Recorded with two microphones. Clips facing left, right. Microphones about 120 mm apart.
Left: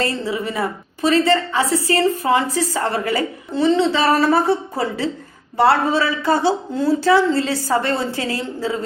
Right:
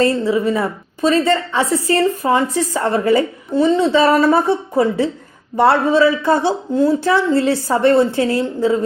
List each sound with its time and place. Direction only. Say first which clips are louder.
0.0 s speech: right 7 dB; 25° right (ahead or behind)